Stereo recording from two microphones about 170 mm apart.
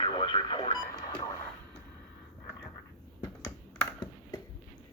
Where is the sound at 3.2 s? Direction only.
15° left (ahead or behind).